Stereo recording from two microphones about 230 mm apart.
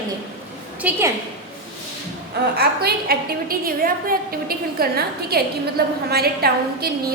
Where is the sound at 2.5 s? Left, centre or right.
Right.